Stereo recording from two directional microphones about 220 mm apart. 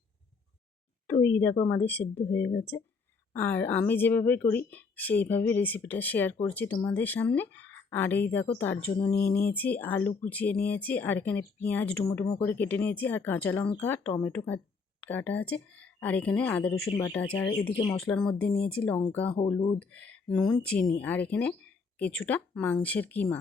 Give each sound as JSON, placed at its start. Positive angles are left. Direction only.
{"t": 1.0, "sound": "speech", "side_deg": 10}
{"t": 17.7, "sound": "speech", "side_deg": 20}
{"t": 18.0, "sound": "speech", "side_deg": 5}